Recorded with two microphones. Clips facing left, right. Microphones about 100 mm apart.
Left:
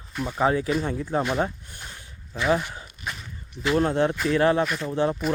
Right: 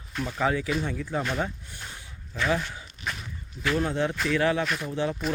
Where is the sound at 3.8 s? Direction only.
40° left (ahead or behind).